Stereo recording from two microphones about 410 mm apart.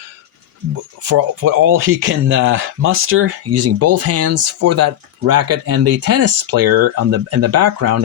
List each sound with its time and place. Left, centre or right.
1.0 s speech: right